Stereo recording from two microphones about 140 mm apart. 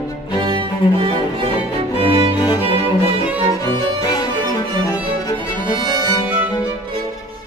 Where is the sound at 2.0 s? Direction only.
40° right (ahead or behind).